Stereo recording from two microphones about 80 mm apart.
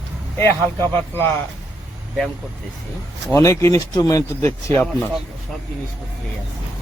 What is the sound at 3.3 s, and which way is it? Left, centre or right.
A man's voice, left.